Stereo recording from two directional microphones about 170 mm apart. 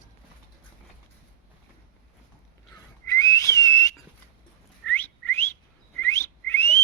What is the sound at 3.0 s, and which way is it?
Whistling, 15° left (ahead or behind).